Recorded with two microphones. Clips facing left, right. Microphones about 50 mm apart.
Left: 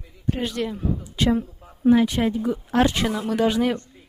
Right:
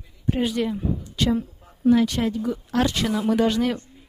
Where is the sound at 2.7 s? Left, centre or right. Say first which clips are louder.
Left 3 dB; left.